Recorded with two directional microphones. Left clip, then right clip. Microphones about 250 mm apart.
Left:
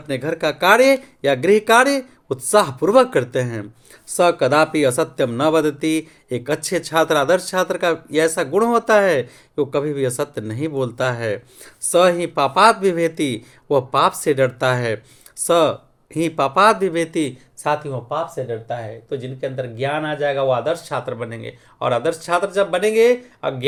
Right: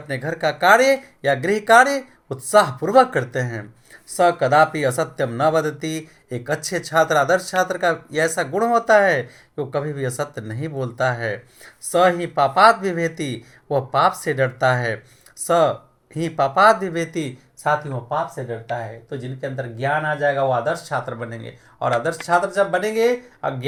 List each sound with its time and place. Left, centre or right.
0.2 s speech: left
4.7 s speech: left
16.2 s speech: left